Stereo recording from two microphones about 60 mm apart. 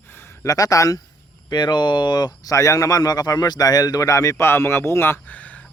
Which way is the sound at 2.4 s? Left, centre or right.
Left.